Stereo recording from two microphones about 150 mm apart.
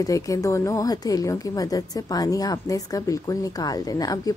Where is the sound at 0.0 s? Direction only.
20° left (ahead or behind).